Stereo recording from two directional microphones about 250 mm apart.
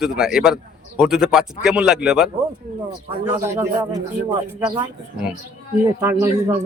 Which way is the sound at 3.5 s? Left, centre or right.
Centre.